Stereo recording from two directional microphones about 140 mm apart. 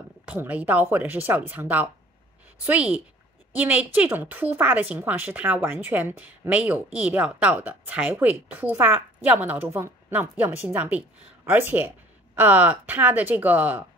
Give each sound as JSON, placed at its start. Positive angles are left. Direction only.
{"t": 0.2, "sound": "a woman's voice", "side_deg": -10}